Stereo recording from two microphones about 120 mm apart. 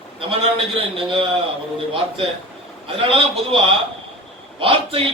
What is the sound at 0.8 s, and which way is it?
Speech, 50° right (ahead or behind).